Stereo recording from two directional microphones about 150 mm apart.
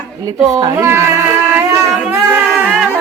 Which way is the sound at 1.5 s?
15° right (ahead or behind).